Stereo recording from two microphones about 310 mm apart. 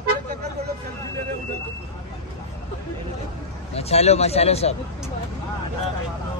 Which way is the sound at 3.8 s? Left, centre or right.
Centre.